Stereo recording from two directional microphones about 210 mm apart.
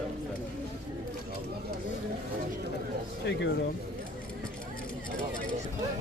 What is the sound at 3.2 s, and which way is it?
Speech, 55° left (ahead or behind).